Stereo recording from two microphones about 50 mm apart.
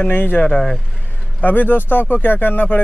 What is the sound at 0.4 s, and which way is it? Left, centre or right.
Speech, left.